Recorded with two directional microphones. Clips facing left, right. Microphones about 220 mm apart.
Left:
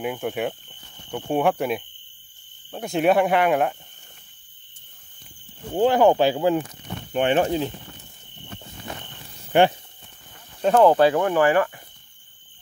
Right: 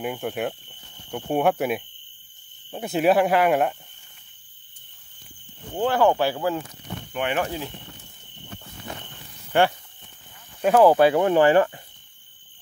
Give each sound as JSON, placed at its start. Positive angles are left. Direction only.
{"t": 0.0, "sound": "speech", "side_deg": 0}
{"t": 5.8, "sound": "speech", "side_deg": 15}
{"t": 7.1, "sound": "speech", "side_deg": 30}
{"t": 9.5, "sound": "speech", "side_deg": 20}
{"t": 10.6, "sound": "speech", "side_deg": -10}
{"t": 11.1, "sound": "speech", "side_deg": -20}